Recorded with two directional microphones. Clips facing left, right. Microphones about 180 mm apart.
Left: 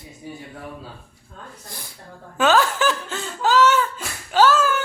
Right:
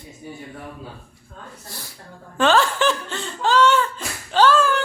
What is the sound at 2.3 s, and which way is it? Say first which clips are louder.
Laughter: even; 5° left (ahead or behind).